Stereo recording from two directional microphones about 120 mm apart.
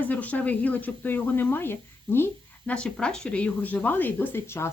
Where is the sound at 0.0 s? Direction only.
15° left (ahead or behind).